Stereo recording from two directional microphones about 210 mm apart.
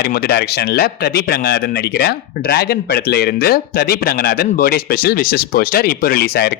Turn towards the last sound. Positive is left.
turn(degrees=50)  # may be behind; listen again after turning